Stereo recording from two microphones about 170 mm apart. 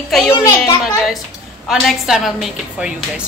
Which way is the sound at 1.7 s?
Centre (ahead or behind).